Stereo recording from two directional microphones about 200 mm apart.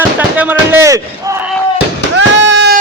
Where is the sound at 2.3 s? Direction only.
60° right (ahead or behind).